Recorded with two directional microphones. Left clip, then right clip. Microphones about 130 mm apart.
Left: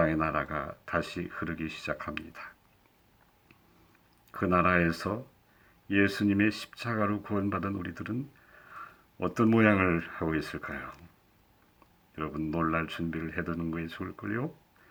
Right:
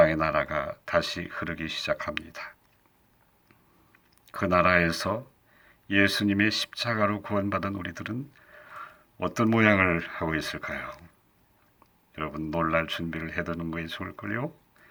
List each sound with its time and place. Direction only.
0.0 s speech: 40° right (ahead or behind)
4.3 s speech: 35° right (ahead or behind)
12.1 s speech: 40° right (ahead or behind)